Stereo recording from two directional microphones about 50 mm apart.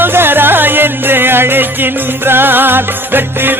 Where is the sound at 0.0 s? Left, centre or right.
Right.